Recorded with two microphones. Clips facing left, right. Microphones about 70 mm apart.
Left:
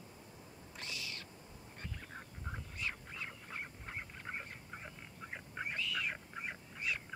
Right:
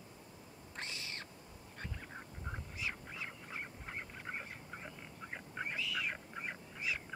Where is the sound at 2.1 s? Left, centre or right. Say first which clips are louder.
Right 1 dB; centre.